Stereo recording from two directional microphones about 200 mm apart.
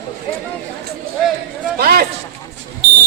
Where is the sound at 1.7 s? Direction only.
50° right (ahead or behind).